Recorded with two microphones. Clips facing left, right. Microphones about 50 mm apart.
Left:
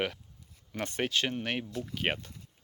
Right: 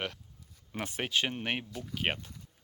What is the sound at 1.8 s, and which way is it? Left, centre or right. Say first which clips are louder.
Speech: left 1 dB; centre.